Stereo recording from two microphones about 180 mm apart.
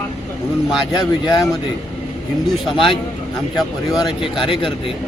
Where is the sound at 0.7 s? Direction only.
25° left (ahead or behind).